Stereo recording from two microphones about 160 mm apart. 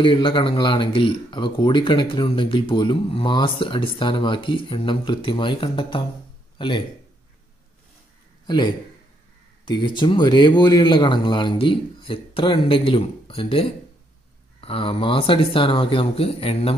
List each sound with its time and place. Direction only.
0.0 s speech: 35° left (ahead or behind)
8.5 s a man's voice: 30° left (ahead or behind)